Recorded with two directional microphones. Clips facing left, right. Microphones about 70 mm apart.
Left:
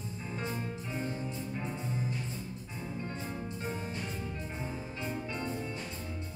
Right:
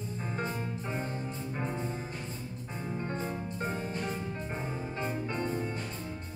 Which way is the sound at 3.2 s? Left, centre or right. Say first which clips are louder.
Right 3 dB; right.